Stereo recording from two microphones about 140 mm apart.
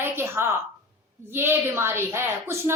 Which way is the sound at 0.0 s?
15° right (ahead or behind).